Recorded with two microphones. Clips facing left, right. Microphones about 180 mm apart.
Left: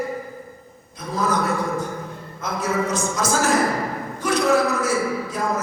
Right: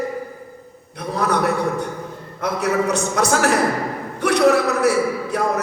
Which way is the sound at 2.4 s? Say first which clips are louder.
Right 4 dB; 70° right (ahead or behind).